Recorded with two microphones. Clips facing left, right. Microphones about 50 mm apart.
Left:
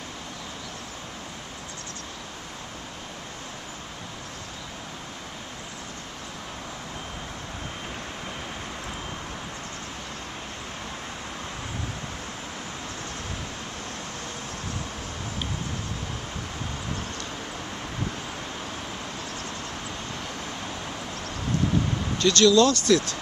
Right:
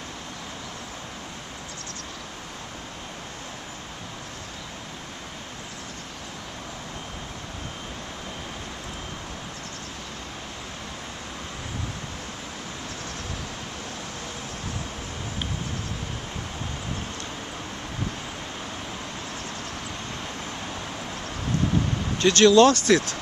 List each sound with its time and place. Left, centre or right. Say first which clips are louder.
22.2 s speech: right 3 dB; right